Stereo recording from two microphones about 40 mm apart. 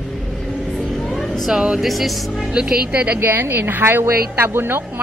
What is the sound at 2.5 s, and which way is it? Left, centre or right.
Speech, right.